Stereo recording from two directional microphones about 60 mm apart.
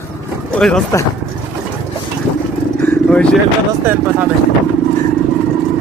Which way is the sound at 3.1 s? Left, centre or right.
Centre.